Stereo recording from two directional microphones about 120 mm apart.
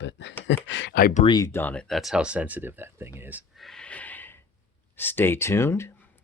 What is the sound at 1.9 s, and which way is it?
Speech, centre (ahead or behind).